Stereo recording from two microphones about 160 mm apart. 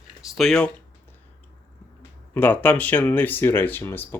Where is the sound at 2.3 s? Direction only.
10° left (ahead or behind).